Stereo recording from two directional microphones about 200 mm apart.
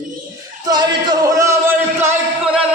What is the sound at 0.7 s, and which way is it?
Music, 20° right (ahead or behind).